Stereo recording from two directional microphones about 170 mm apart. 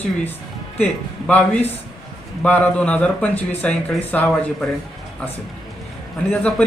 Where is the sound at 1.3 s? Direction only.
10° left (ahead or behind).